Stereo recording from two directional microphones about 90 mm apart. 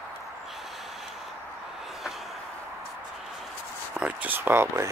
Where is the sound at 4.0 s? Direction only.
15° right (ahead or behind).